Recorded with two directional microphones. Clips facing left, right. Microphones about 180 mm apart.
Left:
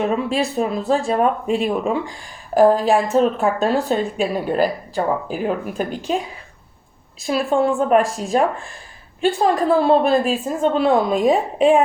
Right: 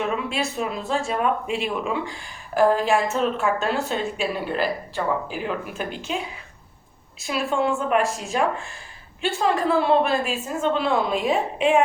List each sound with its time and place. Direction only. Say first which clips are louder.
0.0 s speech: left 6 dB; 40° left (ahead or behind)